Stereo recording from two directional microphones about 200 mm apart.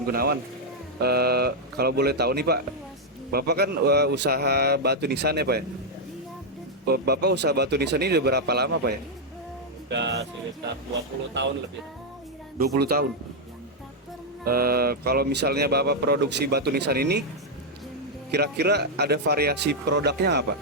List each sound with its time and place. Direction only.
0.1 s speech: 50° right (ahead or behind)
6.8 s speech: 50° right (ahead or behind)
12.5 s speech: 50° right (ahead or behind)
14.4 s speech: 50° right (ahead or behind)
18.3 s speech: 55° right (ahead or behind)